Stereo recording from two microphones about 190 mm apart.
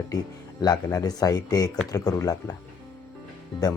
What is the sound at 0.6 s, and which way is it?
Speech, 20° left (ahead or behind).